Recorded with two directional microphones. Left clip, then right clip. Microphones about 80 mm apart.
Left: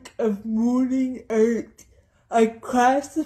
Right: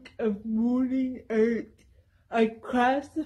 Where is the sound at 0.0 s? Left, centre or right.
Left.